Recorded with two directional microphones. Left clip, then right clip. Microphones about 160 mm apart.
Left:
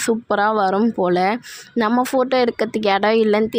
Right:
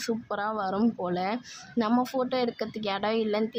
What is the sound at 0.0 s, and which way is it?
Speech, 35° left (ahead or behind).